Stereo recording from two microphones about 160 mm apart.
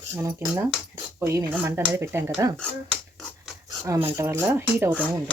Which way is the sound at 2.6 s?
Centre (ahead or behind).